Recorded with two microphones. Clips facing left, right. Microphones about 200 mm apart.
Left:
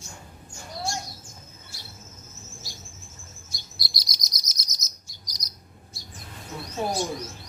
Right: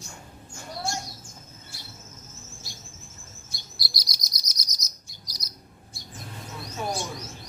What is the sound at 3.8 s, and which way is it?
Chirp, 25° left (ahead or behind).